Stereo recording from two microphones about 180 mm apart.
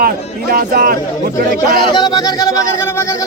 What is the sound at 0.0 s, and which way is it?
Speech, 55° right (ahead or behind).